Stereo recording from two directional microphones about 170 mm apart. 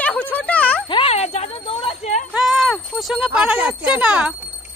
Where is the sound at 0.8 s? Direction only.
35° left (ahead or behind).